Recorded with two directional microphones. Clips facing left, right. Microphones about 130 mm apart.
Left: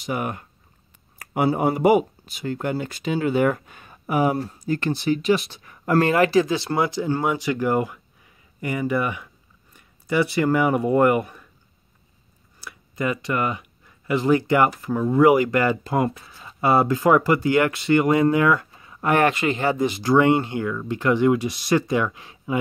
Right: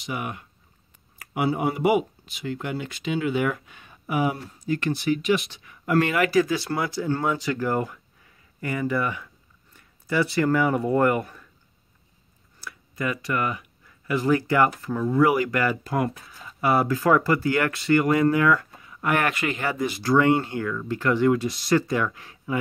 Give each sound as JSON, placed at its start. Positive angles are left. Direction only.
{"t": 0.0, "sound": "speech", "side_deg": 45}
{"t": 12.6, "sound": "speech", "side_deg": 25}